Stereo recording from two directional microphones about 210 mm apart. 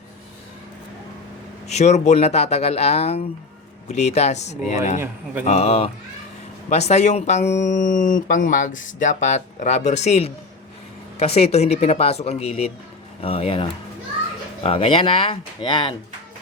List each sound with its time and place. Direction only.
1.6 s speech: 30° left (ahead or behind)